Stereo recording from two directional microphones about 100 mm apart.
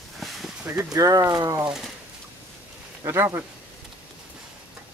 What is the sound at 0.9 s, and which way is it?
Speech, 35° right (ahead or behind).